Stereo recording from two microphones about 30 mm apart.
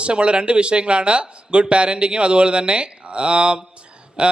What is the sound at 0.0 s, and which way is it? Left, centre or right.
A man's voice, right.